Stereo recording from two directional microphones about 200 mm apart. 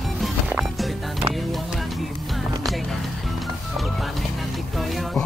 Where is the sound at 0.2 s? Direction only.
5° right (ahead or behind).